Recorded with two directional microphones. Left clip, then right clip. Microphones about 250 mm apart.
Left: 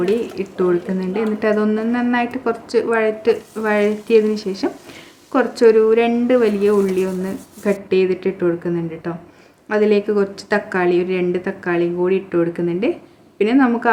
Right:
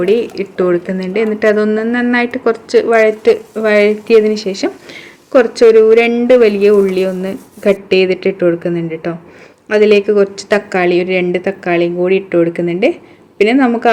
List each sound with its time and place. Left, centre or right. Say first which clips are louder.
0.1 s speech: right 7 dB; centre